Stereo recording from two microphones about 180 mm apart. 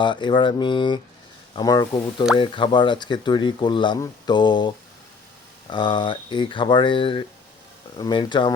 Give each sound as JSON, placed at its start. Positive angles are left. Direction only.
{"t": 0.0, "sound": "speech", "side_deg": 25}
{"t": 5.7, "sound": "speech", "side_deg": 25}